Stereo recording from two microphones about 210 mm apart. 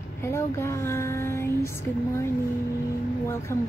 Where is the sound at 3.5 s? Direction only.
15° left (ahead or behind).